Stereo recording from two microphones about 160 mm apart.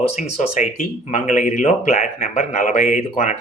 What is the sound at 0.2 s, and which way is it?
Speech, 45° left (ahead or behind).